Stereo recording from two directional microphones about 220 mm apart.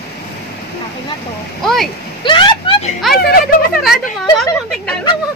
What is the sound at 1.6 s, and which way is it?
Speech, centre (ahead or behind).